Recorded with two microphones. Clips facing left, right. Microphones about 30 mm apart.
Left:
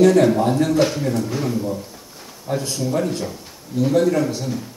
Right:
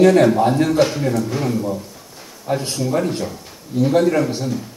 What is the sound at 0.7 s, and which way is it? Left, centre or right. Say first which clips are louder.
Speech: right 2 dB; centre.